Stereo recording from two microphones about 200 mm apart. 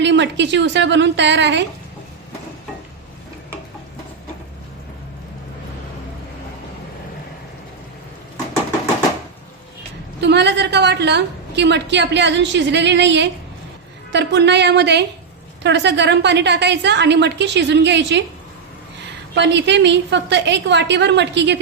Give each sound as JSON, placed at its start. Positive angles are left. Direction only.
{"t": 0.0, "sound": "a woman's voice", "side_deg": -60}
{"t": 10.2, "sound": "a woman's voice", "side_deg": -60}
{"t": 19.3, "sound": "a woman's voice", "side_deg": -60}